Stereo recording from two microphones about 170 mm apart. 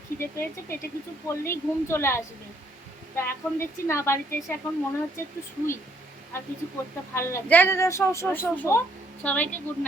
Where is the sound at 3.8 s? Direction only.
15° left (ahead or behind).